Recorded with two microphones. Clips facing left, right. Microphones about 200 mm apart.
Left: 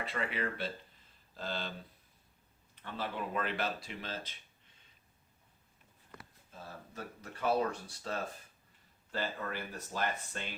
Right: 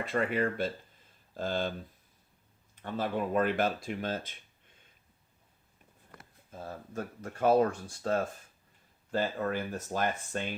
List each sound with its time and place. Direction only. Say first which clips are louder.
0.0 s speech: right 7 dB; 45° right (ahead or behind)
2.8 s speech: right 7 dB; 45° right (ahead or behind)
6.1 s speech: right 5 dB; 50° right (ahead or behind)